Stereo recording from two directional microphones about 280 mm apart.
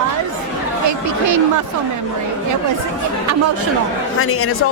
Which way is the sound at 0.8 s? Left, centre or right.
Right.